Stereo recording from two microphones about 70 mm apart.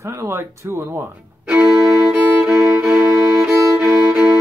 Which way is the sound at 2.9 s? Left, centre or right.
Right.